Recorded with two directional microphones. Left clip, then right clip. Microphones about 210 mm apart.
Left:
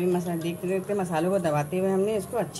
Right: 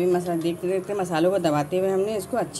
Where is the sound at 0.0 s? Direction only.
35° right (ahead or behind).